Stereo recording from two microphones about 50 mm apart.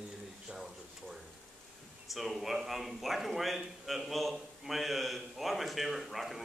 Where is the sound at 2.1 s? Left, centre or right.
Centre.